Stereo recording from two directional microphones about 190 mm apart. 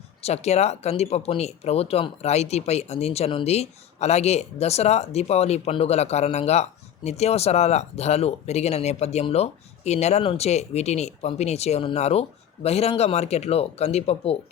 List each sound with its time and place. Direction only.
0.2 s speech: 35° left (ahead or behind)